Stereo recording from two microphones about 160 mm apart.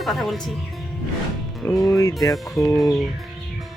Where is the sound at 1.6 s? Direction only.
20° left (ahead or behind).